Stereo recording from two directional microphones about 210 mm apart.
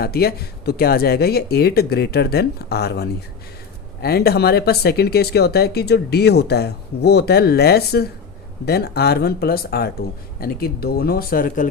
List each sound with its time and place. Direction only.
0.0 s speech: 50° left (ahead or behind)